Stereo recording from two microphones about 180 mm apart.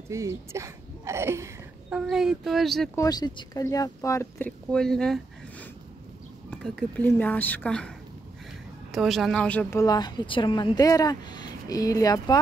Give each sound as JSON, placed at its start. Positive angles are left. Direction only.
{"t": 0.1, "sound": "speech", "side_deg": -15}
{"t": 2.0, "sound": "speech", "side_deg": -5}
{"t": 3.0, "sound": "speech", "side_deg": 20}
{"t": 8.9, "sound": "a woman's voice", "side_deg": 0}